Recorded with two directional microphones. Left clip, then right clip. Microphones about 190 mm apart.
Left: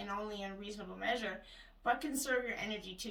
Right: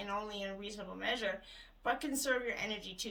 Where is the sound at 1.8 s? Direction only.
45° right (ahead or behind).